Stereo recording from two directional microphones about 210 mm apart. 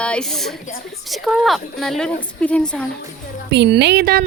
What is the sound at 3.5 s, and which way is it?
Speech, 55° right (ahead or behind).